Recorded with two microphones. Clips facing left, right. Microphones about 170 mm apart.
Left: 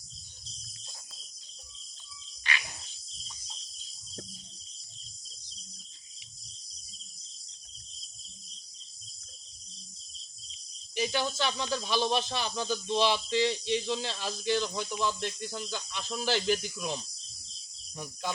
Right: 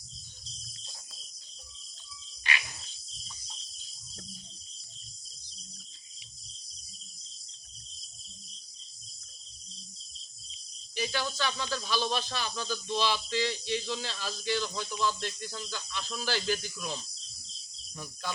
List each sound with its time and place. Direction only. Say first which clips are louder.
10.9 s speech: left 3 dB; 20° left (ahead or behind)